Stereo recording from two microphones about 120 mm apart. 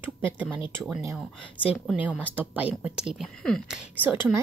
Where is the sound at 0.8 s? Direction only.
5° right (ahead or behind).